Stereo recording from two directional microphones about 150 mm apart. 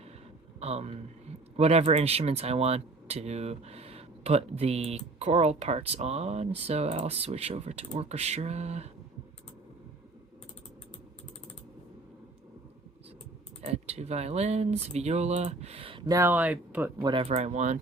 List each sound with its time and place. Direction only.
0.6 s speech: 45° right (ahead or behind)
13.6 s speech: 45° right (ahead or behind)
16.0 s speech: 20° right (ahead or behind)
17.0 s speech: 35° right (ahead or behind)
17.3 s speech: 50° right (ahead or behind)